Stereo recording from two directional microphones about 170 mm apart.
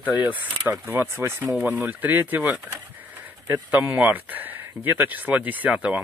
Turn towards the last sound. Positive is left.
turn(degrees=-10)  # may be behind; listen again after turning